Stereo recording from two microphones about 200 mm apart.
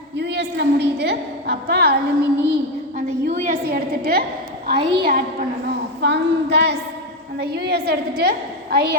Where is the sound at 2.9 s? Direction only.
45° right (ahead or behind).